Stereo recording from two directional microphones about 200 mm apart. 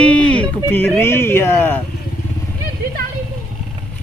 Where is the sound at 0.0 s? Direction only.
5° left (ahead or behind).